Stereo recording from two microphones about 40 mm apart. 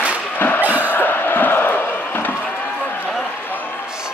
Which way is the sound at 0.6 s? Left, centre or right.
Right.